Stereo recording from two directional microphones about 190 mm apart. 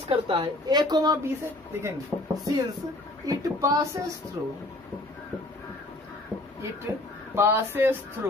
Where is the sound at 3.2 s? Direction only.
20° right (ahead or behind).